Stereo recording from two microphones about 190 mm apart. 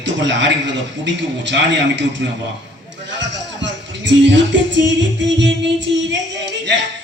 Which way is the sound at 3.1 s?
70° right (ahead or behind).